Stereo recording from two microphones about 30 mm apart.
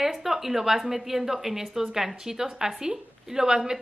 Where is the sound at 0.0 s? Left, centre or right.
Centre.